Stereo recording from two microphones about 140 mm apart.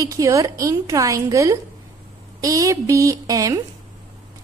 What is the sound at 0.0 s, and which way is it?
A woman's voice, 25° right (ahead or behind).